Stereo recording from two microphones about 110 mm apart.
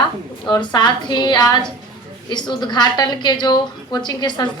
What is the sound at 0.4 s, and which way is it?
A woman's voice, 40° left (ahead or behind).